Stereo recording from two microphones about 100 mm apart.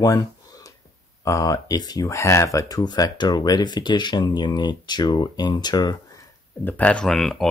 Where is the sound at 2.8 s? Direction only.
45° left (ahead or behind).